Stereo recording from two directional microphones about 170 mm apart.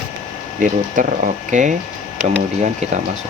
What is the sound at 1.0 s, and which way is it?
Speech, 50° right (ahead or behind).